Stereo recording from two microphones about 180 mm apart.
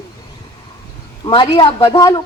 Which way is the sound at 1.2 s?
25° left (ahead or behind).